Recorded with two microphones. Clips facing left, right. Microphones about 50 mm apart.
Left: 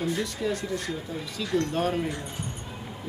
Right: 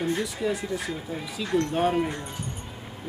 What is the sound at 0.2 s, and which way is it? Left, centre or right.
Speech, centre.